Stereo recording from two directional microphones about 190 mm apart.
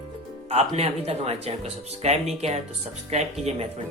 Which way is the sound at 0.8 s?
30° right (ahead or behind).